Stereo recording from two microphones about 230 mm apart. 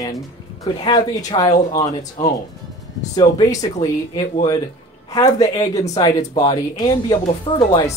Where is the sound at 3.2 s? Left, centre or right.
Centre.